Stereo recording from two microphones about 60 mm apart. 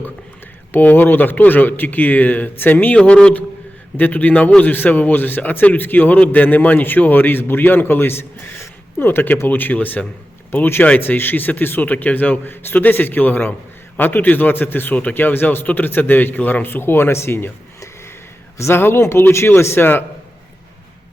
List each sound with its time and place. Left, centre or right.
0.7 s a man's voice: left
3.9 s a man's voice: left
9.0 s a man's voice: left
18.7 s a man's voice: left